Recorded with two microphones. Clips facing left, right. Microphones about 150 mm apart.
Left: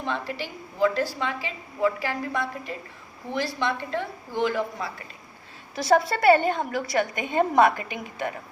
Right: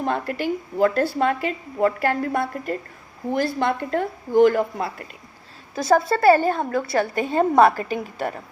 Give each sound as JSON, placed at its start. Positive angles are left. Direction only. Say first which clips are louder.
{"t": 0.0, "sound": "a woman's voice", "louder": "right 6 dB", "side_deg": -50}
{"t": 6.1, "sound": "a woman's voice", "louder": "right 3 dB", "side_deg": -30}